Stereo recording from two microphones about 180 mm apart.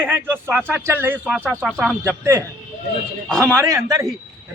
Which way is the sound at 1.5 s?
5° left (ahead or behind).